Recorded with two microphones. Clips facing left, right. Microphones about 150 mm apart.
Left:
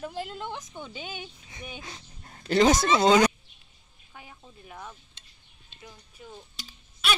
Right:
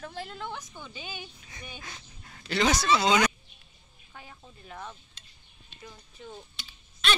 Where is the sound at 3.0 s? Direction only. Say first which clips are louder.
Left 7 dB; 35° left (ahead or behind).